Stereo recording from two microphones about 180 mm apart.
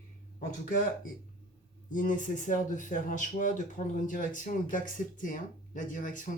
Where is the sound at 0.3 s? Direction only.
50° left (ahead or behind).